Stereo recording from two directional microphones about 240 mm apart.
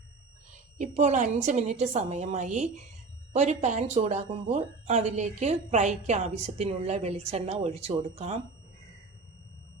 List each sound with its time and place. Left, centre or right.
0.8 s speech: right